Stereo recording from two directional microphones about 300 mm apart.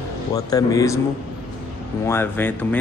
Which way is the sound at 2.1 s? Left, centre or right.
Centre.